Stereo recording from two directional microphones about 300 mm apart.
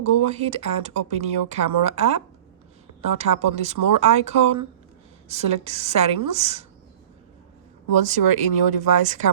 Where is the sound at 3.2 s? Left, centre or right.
Right.